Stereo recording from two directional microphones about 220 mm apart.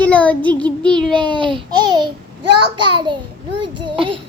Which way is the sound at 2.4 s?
90° right.